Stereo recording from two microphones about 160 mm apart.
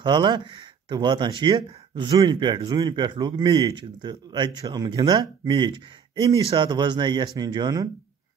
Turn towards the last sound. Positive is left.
turn(degrees=-25)  # may be behind; listen again after turning